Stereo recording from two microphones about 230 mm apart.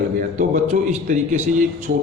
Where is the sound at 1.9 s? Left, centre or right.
Right.